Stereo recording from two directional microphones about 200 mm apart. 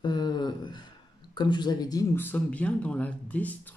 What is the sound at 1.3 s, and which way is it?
Speech, 20° left (ahead or behind).